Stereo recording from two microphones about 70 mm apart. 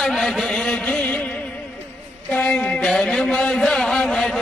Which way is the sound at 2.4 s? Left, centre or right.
Centre.